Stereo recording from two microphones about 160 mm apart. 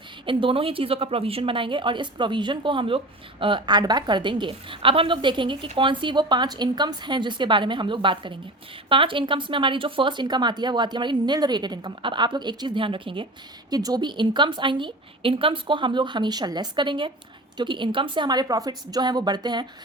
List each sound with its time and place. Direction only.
0.3 s a woman's voice: 30° right (ahead or behind)